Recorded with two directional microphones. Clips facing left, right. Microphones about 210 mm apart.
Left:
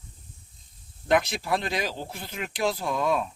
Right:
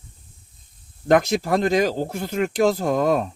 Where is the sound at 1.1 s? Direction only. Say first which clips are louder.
Right 6 dB; 45° right (ahead or behind).